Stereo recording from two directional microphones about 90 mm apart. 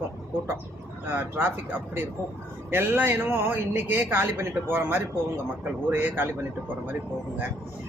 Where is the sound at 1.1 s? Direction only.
25° right (ahead or behind).